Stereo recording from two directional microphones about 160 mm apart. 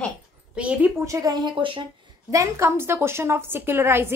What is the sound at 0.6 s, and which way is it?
A woman's voice, 10° right (ahead or behind).